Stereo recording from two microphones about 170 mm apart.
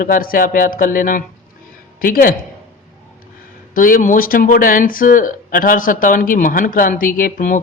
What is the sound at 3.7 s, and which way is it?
Speech, 55° left (ahead or behind).